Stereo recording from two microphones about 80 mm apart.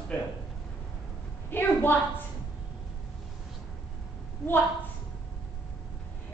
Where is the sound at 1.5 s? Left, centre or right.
Left.